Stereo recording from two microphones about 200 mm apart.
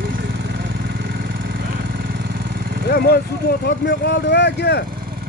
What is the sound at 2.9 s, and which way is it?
Speech, 50° left (ahead or behind).